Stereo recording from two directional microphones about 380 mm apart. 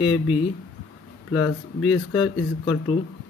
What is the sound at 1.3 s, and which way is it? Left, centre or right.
Speech, centre.